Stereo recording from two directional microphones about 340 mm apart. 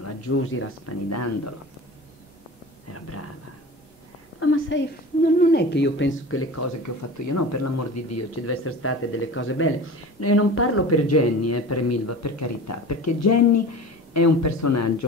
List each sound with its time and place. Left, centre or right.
0.0 s speech: left
2.9 s speech: left
4.4 s a woman's voice: left
7.2 s speech: left